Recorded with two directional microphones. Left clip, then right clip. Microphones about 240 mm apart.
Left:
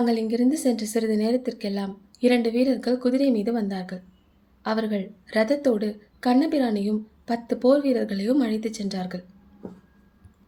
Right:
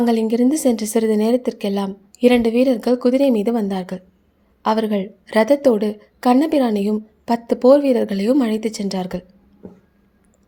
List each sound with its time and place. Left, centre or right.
0.0 s a woman's voice: right